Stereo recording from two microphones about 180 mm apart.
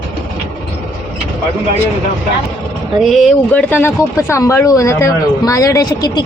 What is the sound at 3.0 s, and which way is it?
Speech, centre (ahead or behind).